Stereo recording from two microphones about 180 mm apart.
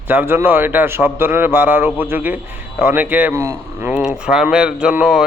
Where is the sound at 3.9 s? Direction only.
5° right (ahead or behind).